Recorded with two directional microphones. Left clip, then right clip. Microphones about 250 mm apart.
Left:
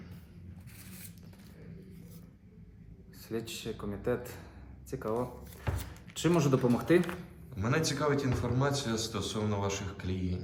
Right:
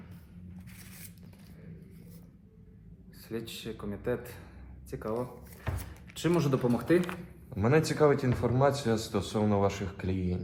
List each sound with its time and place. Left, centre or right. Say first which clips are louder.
3.2 s a man's voice: left 1 dB; centre
7.5 s a man's voice: right 5 dB; right